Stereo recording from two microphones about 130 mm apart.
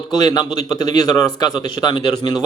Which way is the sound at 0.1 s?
30° left (ahead or behind).